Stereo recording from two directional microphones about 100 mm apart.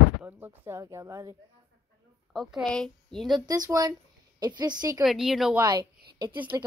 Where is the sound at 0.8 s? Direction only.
35° right (ahead or behind).